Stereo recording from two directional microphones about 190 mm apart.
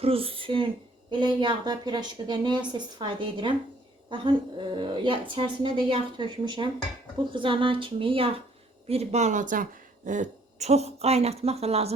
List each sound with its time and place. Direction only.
0.0 s a woman's voice: 30° right (ahead or behind)